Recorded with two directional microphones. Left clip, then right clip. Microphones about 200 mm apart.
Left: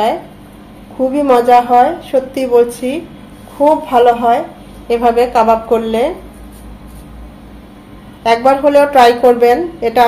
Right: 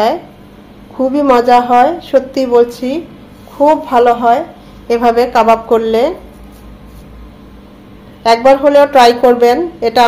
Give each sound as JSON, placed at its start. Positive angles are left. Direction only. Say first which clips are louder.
{"t": 1.1, "sound": "a woman's voice", "louder": "even", "side_deg": -25}
{"t": 8.2, "sound": "a woman's voice", "louder": "right 2 dB", "side_deg": -20}